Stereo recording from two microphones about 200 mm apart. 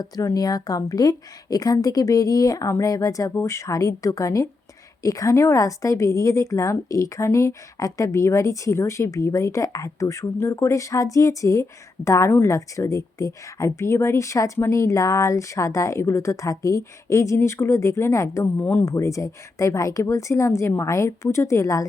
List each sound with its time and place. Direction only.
0.0 s a woman's voice: 20° left (ahead or behind)